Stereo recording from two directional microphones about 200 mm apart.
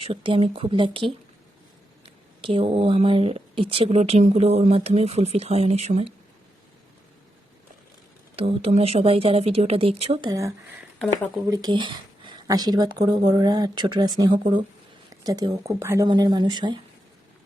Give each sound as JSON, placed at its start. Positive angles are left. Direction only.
{"t": 0.0, "sound": "speech", "side_deg": -25}
{"t": 8.4, "sound": "speech", "side_deg": -30}
{"t": 15.1, "sound": "a sound", "side_deg": -20}
{"t": 15.6, "sound": "speech", "side_deg": -15}